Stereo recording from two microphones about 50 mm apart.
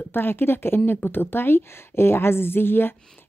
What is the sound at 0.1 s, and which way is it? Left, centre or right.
Speech, left.